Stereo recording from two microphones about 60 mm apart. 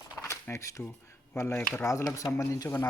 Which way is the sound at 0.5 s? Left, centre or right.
Left.